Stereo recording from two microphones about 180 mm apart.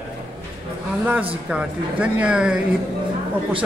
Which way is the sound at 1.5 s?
5° right (ahead or behind).